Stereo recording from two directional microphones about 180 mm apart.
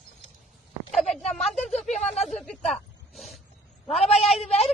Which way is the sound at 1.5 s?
40° left (ahead or behind).